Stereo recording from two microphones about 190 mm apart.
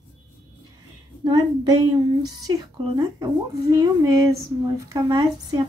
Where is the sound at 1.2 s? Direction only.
20° right (ahead or behind).